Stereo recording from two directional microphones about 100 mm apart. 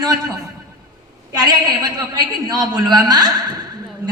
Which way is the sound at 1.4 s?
45° right (ahead or behind).